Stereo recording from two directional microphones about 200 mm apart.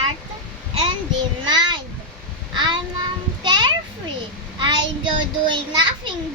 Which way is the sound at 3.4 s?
20° right (ahead or behind).